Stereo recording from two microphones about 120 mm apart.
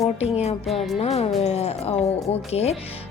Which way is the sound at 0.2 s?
60° left (ahead or behind).